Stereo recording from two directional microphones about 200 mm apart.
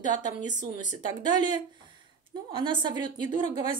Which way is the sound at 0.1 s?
35° left (ahead or behind).